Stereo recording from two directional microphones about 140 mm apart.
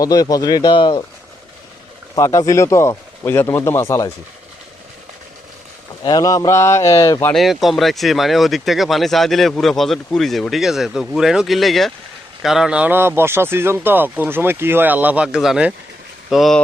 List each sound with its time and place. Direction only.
0.0 s speech: 25° left (ahead or behind)
2.1 s speech: 25° left (ahead or behind)
6.0 s speech: 30° left (ahead or behind)
7.3 s speech: centre (ahead or behind)